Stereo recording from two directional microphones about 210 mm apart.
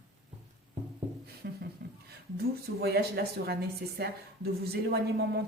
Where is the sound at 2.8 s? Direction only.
50° right (ahead or behind).